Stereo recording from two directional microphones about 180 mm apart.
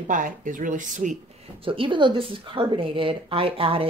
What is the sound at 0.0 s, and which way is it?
Speech, 45° right (ahead or behind).